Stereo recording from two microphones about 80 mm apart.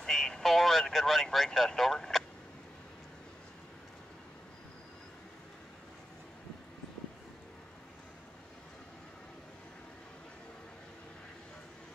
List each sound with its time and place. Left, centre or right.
0.0 s speech: centre